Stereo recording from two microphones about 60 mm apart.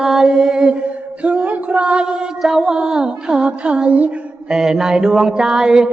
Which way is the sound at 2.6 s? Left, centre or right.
Centre.